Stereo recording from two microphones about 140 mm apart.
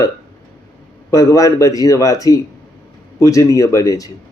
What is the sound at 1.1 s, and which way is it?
A man's voice, 25° left (ahead or behind).